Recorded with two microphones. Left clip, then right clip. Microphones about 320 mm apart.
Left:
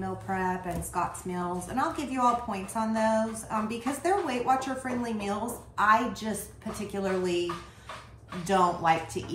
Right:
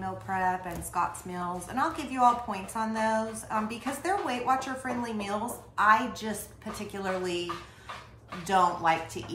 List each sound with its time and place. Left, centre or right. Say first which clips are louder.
0.0 s a woman's voice: right 2 dB; centre
8.5 s a woman's voice: even; centre